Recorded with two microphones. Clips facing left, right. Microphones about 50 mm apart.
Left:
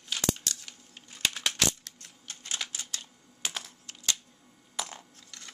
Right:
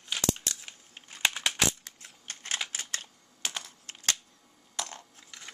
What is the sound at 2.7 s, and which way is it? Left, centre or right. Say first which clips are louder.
Camera: right 3 dB; right.